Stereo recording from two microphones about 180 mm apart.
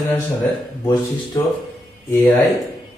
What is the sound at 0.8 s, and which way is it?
Speech, 20° left (ahead or behind).